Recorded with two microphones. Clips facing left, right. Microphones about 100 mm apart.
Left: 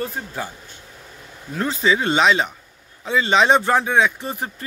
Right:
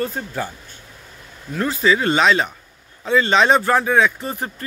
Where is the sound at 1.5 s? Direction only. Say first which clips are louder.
Right 2 dB; 25° left (ahead or behind).